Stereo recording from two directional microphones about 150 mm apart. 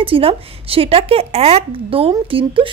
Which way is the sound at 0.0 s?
35° right (ahead or behind).